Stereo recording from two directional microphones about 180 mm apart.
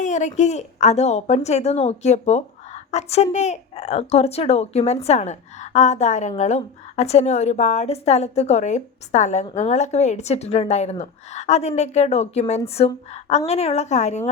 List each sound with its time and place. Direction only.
0.0 s a woman's voice: 40° left (ahead or behind)